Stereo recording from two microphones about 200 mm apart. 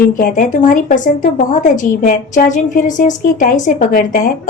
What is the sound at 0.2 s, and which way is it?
A woman's voice, 45° left (ahead or behind).